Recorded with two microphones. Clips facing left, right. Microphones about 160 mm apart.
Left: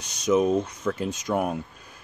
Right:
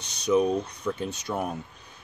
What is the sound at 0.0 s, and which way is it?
Speech, 60° right (ahead or behind).